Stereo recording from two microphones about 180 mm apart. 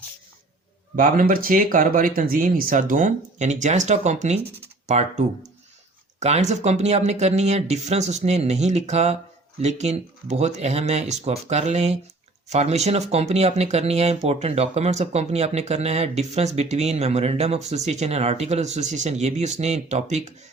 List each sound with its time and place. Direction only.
0.9 s speech: 50° right (ahead or behind)